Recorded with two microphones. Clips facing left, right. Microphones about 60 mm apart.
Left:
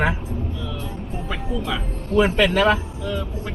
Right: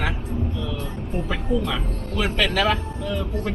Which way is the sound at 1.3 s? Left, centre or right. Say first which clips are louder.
Right 1 dB; centre.